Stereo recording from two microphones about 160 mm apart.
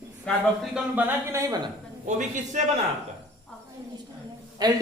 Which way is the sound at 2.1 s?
50° right (ahead or behind).